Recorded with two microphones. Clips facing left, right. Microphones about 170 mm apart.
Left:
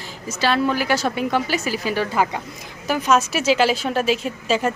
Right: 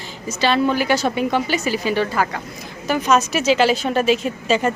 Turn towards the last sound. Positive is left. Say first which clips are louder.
# right 2 dB
turn(degrees=0)  # may be behind; listen again after turning